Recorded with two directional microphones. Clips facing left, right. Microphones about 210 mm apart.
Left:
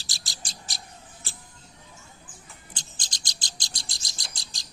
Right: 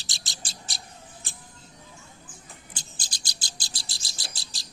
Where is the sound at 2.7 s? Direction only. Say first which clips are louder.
Even; 10° right (ahead or behind).